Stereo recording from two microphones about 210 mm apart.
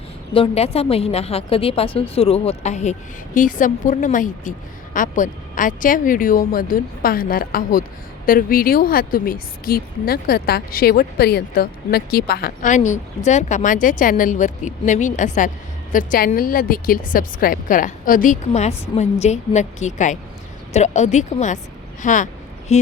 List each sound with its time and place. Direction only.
0.3 s a woman's voice: 25° left (ahead or behind)